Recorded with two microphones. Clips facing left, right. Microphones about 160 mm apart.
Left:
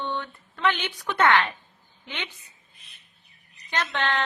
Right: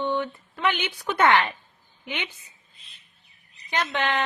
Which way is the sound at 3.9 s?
10° right (ahead or behind).